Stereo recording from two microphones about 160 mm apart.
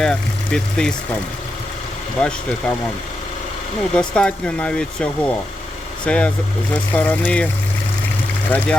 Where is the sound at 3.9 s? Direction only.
5° left (ahead or behind).